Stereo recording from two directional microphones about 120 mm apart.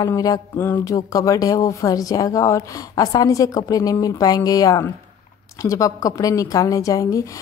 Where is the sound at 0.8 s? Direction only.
30° left (ahead or behind).